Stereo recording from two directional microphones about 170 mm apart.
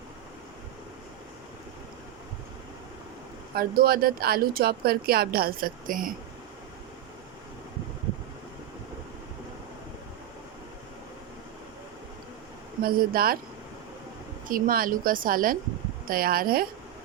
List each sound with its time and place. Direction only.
3.5 s speech: 60° right (ahead or behind)
12.8 s speech: 60° right (ahead or behind)
14.4 s speech: 55° right (ahead or behind)